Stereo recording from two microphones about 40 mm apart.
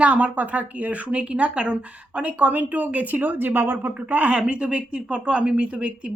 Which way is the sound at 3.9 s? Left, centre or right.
Right.